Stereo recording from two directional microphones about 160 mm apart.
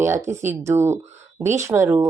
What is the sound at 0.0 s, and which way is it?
Speech, 15° right (ahead or behind).